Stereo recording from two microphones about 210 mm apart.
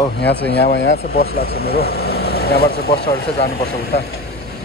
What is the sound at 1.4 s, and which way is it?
Speech, 50° left (ahead or behind).